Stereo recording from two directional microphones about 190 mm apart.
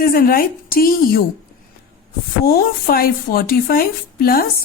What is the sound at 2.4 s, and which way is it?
A woman's voice, 50° left (ahead or behind).